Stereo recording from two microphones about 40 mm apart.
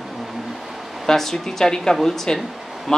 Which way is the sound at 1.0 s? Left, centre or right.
Centre.